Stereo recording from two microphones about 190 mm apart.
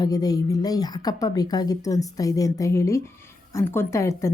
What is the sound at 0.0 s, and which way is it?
A woman's voice, 20° left (ahead or behind).